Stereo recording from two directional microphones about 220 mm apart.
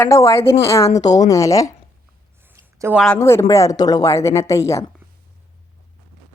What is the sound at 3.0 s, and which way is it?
Speech, 10° left (ahead or behind).